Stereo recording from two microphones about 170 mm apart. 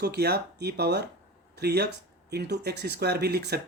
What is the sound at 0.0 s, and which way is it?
Speech, 70° right (ahead or behind).